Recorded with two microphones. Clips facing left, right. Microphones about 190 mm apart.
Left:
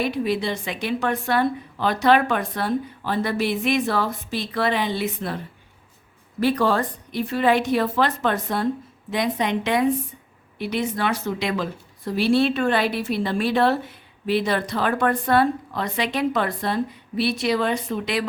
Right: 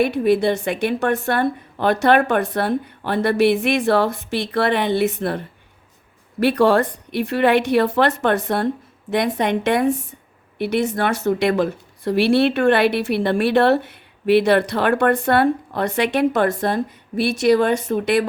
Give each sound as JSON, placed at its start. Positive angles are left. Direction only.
{"t": 0.0, "sound": "speech", "side_deg": -55}
{"t": 6.4, "sound": "speech", "side_deg": -65}